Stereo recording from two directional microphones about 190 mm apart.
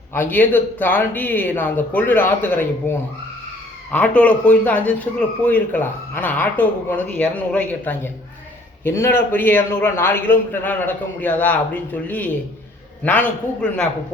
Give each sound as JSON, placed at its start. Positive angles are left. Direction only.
{"t": 0.1, "sound": "speech", "side_deg": 10}
{"t": 13.6, "sound": "speech", "side_deg": 5}